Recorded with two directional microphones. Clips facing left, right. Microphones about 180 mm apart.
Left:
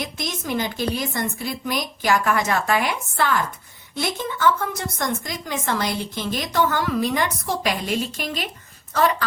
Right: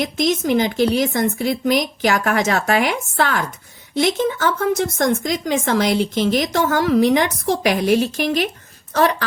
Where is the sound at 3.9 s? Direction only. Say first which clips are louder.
Right 9 dB; 90° right.